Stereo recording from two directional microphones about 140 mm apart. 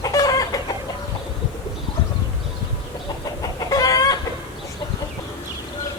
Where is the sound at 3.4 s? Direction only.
25° left (ahead or behind).